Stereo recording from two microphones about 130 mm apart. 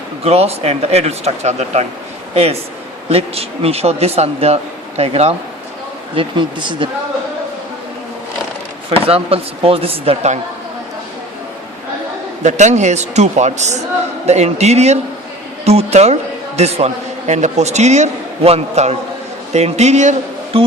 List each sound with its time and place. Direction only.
0.3 s a man's voice: 50° right (ahead or behind)
6.1 s speech: 40° right (ahead or behind)
8.9 s a man's voice: 50° right (ahead or behind)
12.4 s a man's voice: 65° right (ahead or behind)